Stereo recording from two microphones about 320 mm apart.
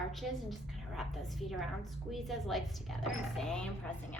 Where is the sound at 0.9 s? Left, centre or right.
Centre.